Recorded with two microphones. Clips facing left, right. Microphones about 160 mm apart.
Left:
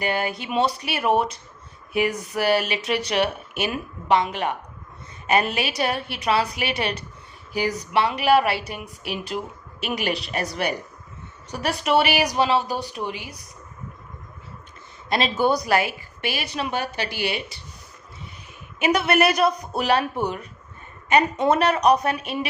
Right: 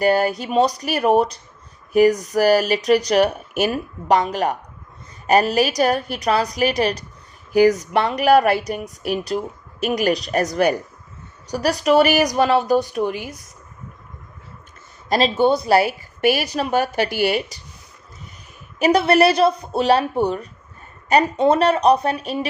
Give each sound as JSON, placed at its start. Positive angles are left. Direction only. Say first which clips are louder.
{"t": 0.0, "sound": "a woman's voice", "louder": "right 8 dB", "side_deg": -40}
{"t": 15.1, "sound": "a woman's voice", "louder": "right 4 dB", "side_deg": -30}
{"t": 16.2, "sound": "a woman's voice", "louder": "right 9 dB", "side_deg": -45}
{"t": 18.8, "sound": "speech", "louder": "right 5 dB", "side_deg": -35}